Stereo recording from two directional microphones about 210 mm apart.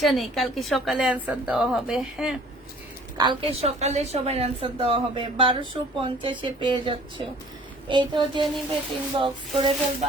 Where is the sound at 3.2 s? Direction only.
25° right (ahead or behind).